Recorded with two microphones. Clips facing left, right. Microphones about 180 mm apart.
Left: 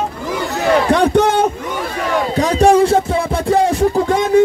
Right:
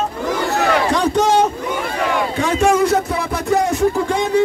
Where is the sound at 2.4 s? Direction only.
35° left (ahead or behind).